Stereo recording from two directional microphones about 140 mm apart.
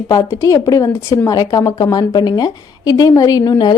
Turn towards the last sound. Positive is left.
turn(degrees=30)  # may be behind; listen again after turning